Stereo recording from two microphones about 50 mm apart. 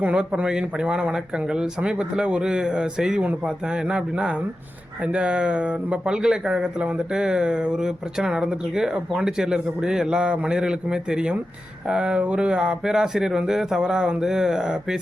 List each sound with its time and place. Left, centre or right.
0.0 s speech: right